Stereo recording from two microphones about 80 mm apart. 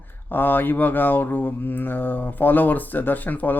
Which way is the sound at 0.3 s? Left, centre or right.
Left.